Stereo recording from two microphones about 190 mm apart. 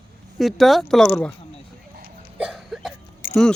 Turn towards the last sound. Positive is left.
turn(degrees=50)  # may be behind; listen again after turning